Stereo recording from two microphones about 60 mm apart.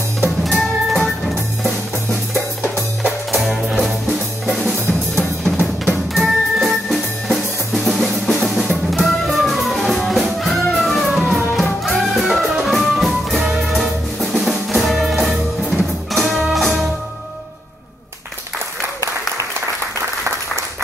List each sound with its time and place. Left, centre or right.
0.5 s music: centre
4.5 s drum kit: centre
5.9 s music: centre
11.1 s music: centre
11.3 s music: centre